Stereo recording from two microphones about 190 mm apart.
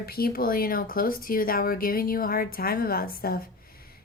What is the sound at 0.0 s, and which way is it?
Speech, 55° left (ahead or behind).